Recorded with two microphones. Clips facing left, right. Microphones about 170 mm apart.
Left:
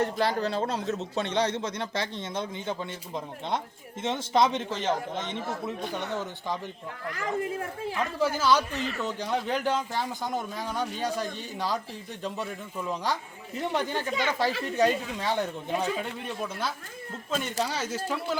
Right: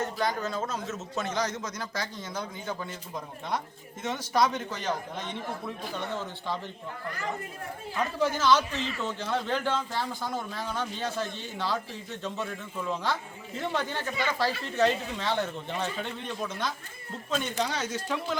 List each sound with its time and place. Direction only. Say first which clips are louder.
0.0 s a man's voice: left 3 dB; 30° left (ahead or behind)
4.0 s a man's voice: left 2 dB; 25° left (ahead or behind)
8.2 s a man's voice: even; 10° left (ahead or behind)
8.7 s a man's voice: left 1 dB; 55° left (ahead or behind)
9.0 s a man's voice: even; 15° left (ahead or behind)